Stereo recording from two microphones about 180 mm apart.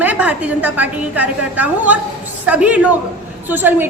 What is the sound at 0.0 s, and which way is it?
A woman's voice, 10° right (ahead or behind).